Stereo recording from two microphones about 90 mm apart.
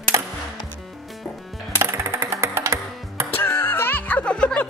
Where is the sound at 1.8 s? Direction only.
30° right (ahead or behind).